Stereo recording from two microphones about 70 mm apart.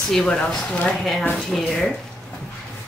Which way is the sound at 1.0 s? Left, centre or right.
Centre.